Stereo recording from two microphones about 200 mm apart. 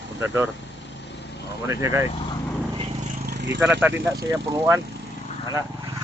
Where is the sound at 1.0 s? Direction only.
60° left (ahead or behind).